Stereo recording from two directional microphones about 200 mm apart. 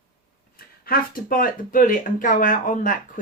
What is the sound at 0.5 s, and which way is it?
Speech, 45° left (ahead or behind).